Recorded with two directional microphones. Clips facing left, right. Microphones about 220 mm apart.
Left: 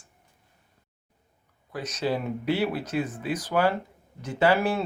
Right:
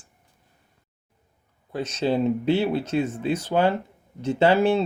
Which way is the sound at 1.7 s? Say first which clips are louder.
Right 5 dB; 30° right (ahead or behind).